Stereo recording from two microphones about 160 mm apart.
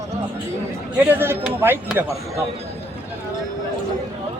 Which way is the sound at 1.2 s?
15° right (ahead or behind).